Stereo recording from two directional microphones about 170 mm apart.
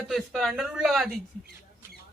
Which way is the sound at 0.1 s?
Centre (ahead or behind).